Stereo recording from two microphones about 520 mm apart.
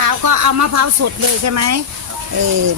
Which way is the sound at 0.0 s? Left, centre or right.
Right.